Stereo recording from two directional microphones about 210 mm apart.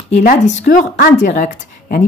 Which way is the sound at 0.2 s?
35° left (ahead or behind).